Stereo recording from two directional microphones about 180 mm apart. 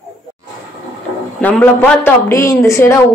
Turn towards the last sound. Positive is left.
turn(degrees=15)  # may be behind; listen again after turning